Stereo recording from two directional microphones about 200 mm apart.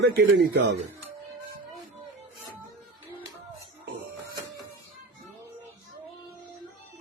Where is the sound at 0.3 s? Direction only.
65° right (ahead or behind).